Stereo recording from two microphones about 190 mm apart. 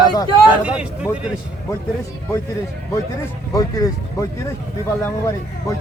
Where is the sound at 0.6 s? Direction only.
5° right (ahead or behind).